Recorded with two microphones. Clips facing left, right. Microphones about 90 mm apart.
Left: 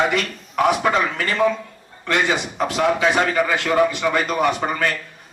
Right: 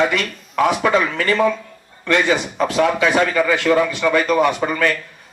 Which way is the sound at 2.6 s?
30° left (ahead or behind).